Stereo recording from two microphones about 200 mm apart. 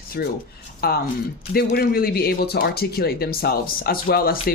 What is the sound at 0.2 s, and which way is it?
Speech, 50° left (ahead or behind).